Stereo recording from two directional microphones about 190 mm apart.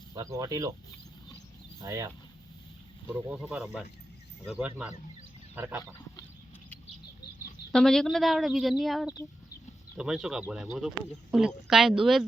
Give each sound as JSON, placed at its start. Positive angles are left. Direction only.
{"t": 0.1, "sound": "speech", "side_deg": -15}
{"t": 1.8, "sound": "speech", "side_deg": -15}
{"t": 3.2, "sound": "speech", "side_deg": -5}
{"t": 7.7, "sound": "speech", "side_deg": 0}